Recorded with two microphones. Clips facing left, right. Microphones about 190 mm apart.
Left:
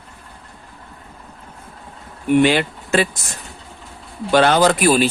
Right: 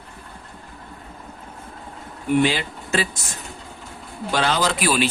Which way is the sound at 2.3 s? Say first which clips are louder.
Left 5 dB; 65° left (ahead or behind).